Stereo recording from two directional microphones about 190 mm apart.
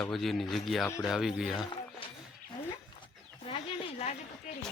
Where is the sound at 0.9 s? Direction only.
15° left (ahead or behind).